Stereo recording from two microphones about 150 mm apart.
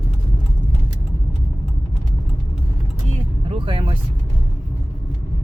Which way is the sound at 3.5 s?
35° right (ahead or behind).